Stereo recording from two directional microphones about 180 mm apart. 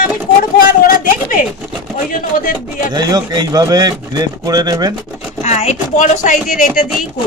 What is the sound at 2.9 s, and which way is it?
Speech, 25° right (ahead or behind).